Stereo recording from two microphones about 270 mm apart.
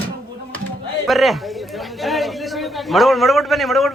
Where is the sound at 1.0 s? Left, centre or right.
Centre.